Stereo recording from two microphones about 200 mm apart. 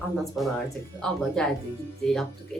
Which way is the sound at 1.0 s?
5° left (ahead or behind).